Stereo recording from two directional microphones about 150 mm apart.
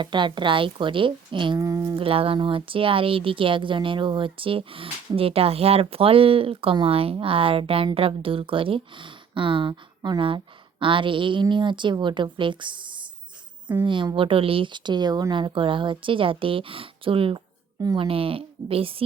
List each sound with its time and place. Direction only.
0.0 s speech: 30° right (ahead or behind)
1.5 s speech: 20° right (ahead or behind)
2.0 s speech: 40° right (ahead or behind)